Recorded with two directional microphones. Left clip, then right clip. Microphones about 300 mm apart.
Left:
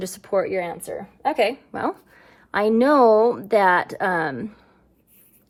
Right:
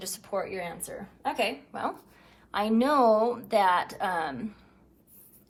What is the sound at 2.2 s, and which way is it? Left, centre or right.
A woman's voice, left.